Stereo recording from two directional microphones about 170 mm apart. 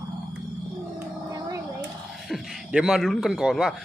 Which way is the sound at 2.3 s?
Centre (ahead or behind).